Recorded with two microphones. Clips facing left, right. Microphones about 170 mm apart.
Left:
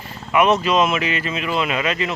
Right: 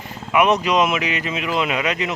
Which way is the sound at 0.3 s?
15° right (ahead or behind).